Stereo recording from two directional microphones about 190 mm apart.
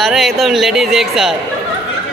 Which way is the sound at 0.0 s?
Centre (ahead or behind).